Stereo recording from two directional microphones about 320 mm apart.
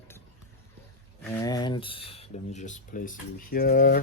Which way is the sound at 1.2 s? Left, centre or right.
Centre.